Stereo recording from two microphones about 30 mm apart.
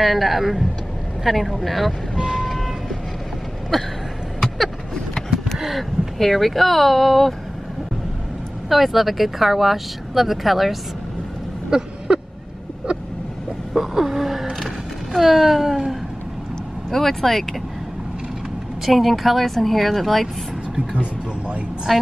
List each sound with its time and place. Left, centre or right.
0.0 s speech: centre
2.4 s vehicle: centre
3.7 s speech: centre
5.8 s speech: centre
8.6 s speech: centre
12.1 s vehicle: right
13.9 s gasp: centre
15.1 s a sound: centre
16.9 s speech: centre
18.9 s speech: centre
20.9 s speech: right
21.9 s speech: centre